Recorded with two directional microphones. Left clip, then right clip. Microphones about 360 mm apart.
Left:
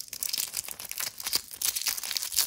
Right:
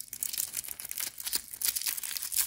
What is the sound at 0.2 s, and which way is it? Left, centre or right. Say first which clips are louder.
Tearing: left 5 dB; centre.